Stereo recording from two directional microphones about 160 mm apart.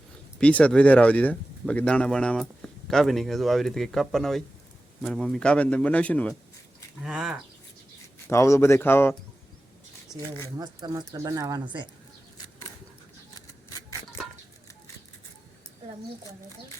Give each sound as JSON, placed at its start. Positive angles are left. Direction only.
{"t": 0.3, "sound": "a man's voice", "side_deg": 5}
{"t": 7.0, "sound": "speech", "side_deg": -5}
{"t": 8.3, "sound": "a man's voice", "side_deg": 20}
{"t": 10.1, "sound": "speech", "side_deg": 0}
{"t": 10.6, "sound": "speech", "side_deg": -25}